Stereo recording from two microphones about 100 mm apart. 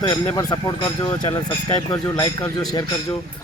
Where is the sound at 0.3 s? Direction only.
40° left (ahead or behind).